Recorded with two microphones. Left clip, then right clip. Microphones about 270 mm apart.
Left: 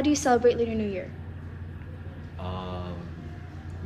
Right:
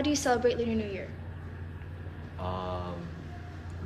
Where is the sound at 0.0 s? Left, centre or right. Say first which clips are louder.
Left 5 dB; centre.